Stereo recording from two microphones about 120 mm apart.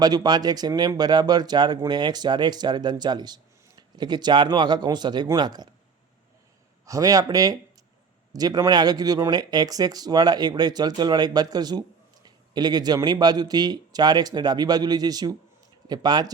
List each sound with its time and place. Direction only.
0.0 s speech: 35° right (ahead or behind)
6.8 s speech: 30° right (ahead or behind)